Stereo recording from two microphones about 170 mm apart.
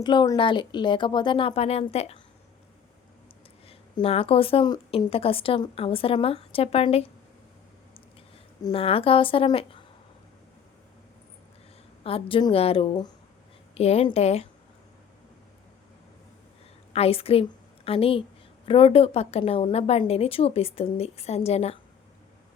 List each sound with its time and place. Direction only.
0.0 s speech: 25° left (ahead or behind)
3.7 s a woman's voice: 35° left (ahead or behind)
8.7 s a woman's voice: 35° left (ahead or behind)
12.0 s a woman's voice: 35° left (ahead or behind)
16.9 s a woman's voice: 35° left (ahead or behind)